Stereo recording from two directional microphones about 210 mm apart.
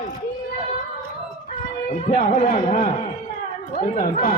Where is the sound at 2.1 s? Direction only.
40° left (ahead or behind).